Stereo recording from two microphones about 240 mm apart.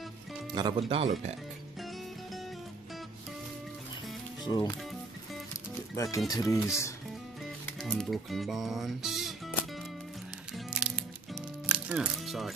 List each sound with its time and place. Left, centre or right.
0.5 s speech: centre
4.5 s speech: centre
6.1 s speech: centre
7.6 s speech: centre
10.5 s music: centre